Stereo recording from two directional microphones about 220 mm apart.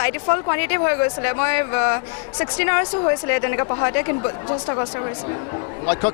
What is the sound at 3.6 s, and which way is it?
A woman's voice, 20° left (ahead or behind).